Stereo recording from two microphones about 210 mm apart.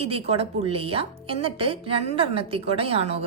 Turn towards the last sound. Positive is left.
turn(degrees=-30)  # may be behind; listen again after turning